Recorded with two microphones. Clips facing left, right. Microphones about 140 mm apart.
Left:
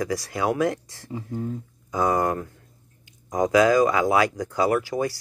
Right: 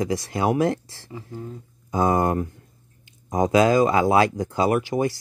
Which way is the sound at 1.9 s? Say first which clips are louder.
Right 2 dB; 25° right (ahead or behind).